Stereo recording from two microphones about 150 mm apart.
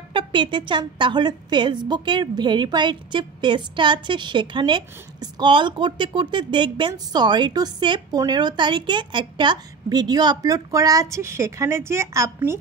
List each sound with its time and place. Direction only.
0.1 s a woman's voice: 35° right (ahead or behind); by 12.5 s 20° right (ahead or behind)